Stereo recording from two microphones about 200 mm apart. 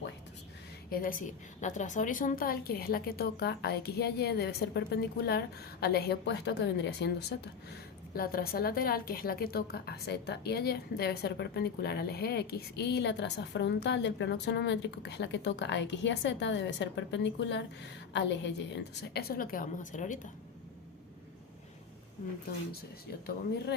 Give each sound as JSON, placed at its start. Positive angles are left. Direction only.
{"t": 0.9, "sound": "a woman's voice", "side_deg": 45}
{"t": 19.1, "sound": "a woman's voice", "side_deg": 45}